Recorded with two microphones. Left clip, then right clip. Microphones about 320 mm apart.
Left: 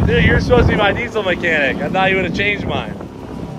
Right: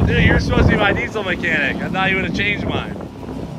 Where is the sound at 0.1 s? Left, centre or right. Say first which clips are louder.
Left 5 dB; centre.